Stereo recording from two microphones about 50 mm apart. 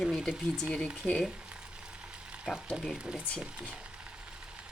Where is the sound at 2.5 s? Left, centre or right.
Centre.